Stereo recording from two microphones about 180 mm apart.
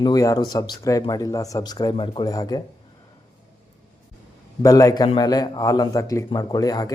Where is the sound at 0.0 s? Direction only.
20° left (ahead or behind).